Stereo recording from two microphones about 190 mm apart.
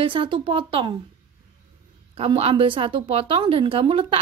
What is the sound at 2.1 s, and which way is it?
Speech, 30° right (ahead or behind).